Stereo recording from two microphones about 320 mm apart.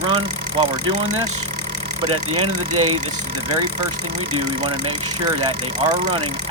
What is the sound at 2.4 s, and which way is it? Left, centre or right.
Speech, right.